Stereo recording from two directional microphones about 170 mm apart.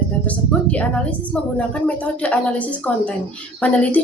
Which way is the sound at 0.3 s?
10° left (ahead or behind).